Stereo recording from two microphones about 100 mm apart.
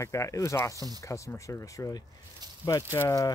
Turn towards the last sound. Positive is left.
turn(degrees=35)  # may be behind; listen again after turning